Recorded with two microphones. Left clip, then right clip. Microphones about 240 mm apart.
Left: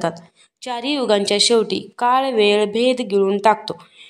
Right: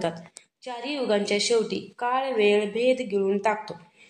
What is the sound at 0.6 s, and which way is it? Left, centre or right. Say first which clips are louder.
Speech: left 8 dB; left.